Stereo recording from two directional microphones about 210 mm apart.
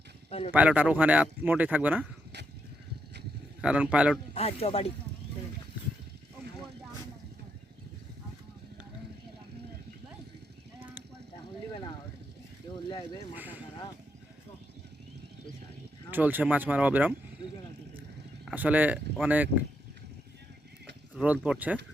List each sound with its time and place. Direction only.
0.3 s speech: 30° left (ahead or behind)
0.5 s speech: 5° right (ahead or behind)
3.6 s a man's voice: 5° right (ahead or behind)
4.4 s speech: 25° left (ahead or behind)
10.8 s clip-clop: 10° right (ahead or behind)
13.3 s a sound: 10° right (ahead or behind)
16.1 s speech: 10° right (ahead or behind)
18.4 s speech: 5° right (ahead or behind)
21.3 s a man's voice: 5° right (ahead or behind)